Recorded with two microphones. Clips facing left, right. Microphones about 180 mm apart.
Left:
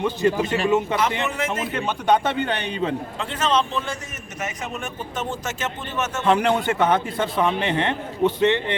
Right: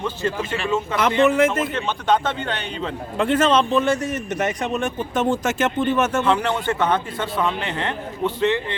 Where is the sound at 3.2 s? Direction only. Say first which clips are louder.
Right 10 dB; 55° right (ahead or behind).